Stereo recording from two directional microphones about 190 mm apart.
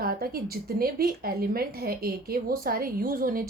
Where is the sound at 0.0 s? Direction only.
55° right (ahead or behind).